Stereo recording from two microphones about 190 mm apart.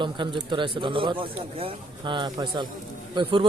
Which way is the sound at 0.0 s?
25° right (ahead or behind).